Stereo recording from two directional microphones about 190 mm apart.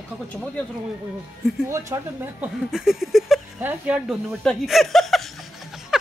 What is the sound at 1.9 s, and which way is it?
Speech, 15° right (ahead or behind).